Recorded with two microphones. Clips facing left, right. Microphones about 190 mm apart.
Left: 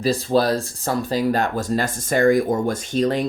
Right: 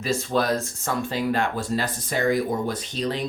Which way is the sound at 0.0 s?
35° left (ahead or behind).